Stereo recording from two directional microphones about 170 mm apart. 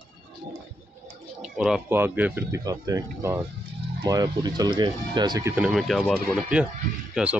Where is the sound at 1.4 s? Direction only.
5° right (ahead or behind); by 5.5 s 25° right (ahead or behind).